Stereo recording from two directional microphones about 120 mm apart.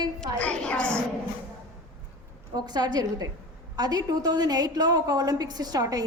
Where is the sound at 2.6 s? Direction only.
35° right (ahead or behind).